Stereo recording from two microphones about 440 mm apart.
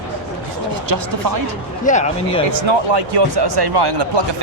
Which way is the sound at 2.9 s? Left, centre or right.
Right.